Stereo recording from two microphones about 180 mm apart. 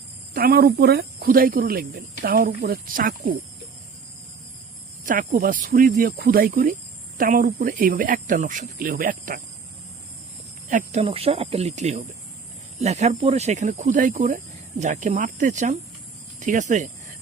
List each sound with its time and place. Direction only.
0.3 s speech: 55° right (ahead or behind)
5.0 s speech: 50° right (ahead or behind)
10.7 s speech: 45° right (ahead or behind)
11.0 s speech: 30° right (ahead or behind)